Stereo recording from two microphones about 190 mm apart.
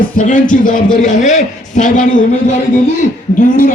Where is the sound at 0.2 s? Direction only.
45° left (ahead or behind).